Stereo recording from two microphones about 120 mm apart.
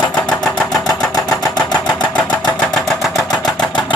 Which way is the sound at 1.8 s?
5° left (ahead or behind).